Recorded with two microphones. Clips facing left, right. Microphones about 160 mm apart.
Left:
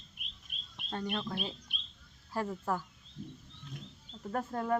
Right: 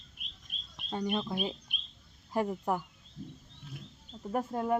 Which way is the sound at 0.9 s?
15° right (ahead or behind).